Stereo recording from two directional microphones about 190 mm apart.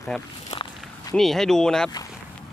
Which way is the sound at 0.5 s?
25° left (ahead or behind).